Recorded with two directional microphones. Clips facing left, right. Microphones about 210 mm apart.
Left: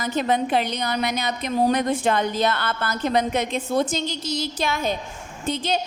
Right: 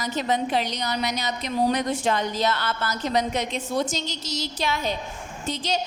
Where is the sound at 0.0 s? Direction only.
55° left (ahead or behind).